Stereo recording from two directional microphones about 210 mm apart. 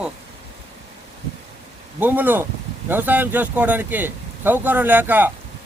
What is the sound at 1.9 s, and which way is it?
Speech, 10° right (ahead or behind).